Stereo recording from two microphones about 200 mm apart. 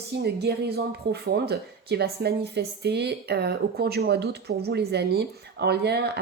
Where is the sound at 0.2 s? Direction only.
55° right (ahead or behind).